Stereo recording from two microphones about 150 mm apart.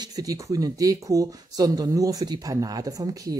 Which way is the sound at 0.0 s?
25° right (ahead or behind).